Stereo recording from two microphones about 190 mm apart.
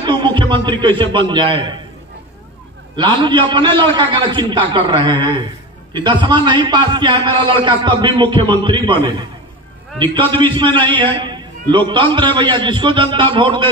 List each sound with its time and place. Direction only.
0.0 s a sound: 25° right (ahead or behind)
1.1 s a man's voice: 25° right (ahead or behind)
3.0 s a man's voice: 25° right (ahead or behind)
10.1 s a man's voice: 25° right (ahead or behind)